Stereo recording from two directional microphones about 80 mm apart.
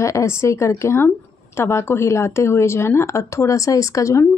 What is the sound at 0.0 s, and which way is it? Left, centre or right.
Speech, left.